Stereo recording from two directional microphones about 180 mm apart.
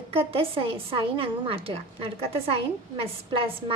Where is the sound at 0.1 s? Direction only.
30° right (ahead or behind).